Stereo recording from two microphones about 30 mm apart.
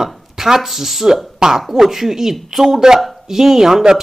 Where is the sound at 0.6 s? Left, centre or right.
Centre.